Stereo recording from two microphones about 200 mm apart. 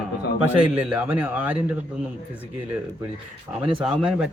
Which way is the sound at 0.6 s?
5° right (ahead or behind).